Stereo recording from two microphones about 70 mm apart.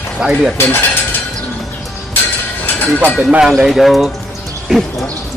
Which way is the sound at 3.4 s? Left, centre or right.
Centre.